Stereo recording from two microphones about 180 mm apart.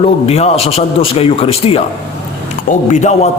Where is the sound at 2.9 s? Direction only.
40° left (ahead or behind).